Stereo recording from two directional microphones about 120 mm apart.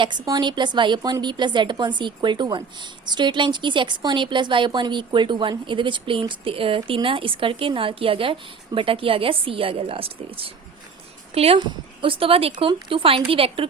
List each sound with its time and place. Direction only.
0.0 s a woman's voice: 40° right (ahead or behind)